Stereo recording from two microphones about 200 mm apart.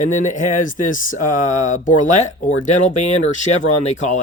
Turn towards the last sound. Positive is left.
turn(degrees=35)  # may be behind; listen again after turning